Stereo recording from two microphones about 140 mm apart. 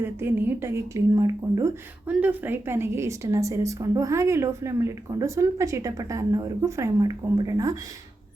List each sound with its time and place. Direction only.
0.0 s a woman's voice: 15° right (ahead or behind)
2.0 s a woman's voice: 10° right (ahead or behind)